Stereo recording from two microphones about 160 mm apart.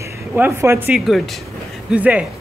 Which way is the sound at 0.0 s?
15° right (ahead or behind).